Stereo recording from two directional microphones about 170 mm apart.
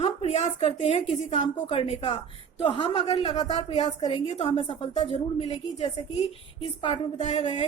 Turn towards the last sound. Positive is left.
turn(degrees=35)  # may be behind; listen again after turning